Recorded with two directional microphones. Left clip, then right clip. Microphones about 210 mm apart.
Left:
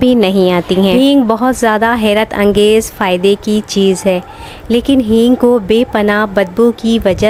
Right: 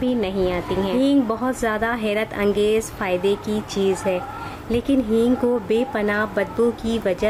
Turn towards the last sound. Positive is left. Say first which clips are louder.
# left 10 dB
turn(degrees=40)  # may be behind; listen again after turning